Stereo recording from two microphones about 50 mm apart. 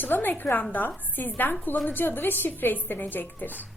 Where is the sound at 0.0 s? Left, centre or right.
Left.